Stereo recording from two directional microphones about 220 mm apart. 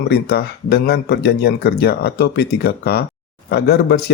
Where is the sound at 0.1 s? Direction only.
45° left (ahead or behind).